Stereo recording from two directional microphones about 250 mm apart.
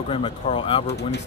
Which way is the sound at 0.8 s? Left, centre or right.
Left.